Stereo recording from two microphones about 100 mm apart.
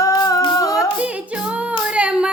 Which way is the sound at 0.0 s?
35° left (ahead or behind).